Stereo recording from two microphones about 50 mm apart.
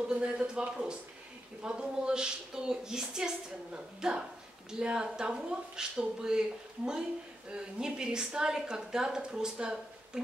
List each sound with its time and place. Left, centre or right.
0.0 s a woman's voice: centre
7.5 s a woman's voice: centre